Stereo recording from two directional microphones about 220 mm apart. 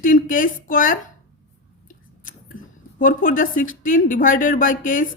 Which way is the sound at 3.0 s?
40° left (ahead or behind).